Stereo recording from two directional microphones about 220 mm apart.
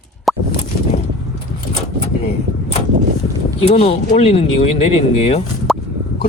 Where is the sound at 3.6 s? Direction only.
30° left (ahead or behind).